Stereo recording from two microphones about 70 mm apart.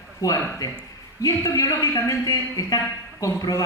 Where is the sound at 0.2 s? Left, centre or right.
Left.